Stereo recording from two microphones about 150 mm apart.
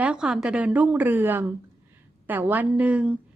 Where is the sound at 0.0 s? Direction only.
5° right (ahead or behind).